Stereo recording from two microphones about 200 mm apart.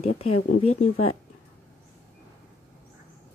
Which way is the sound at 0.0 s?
30° left (ahead or behind).